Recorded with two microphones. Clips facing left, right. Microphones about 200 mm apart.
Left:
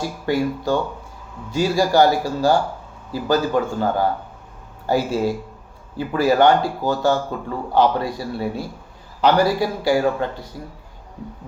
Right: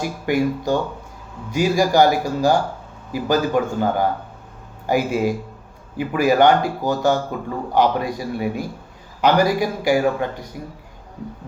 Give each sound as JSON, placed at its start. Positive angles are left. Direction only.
{"t": 0.0, "sound": "speech", "side_deg": -15}